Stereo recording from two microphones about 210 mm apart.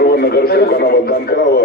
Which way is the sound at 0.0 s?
50° left (ahead or behind).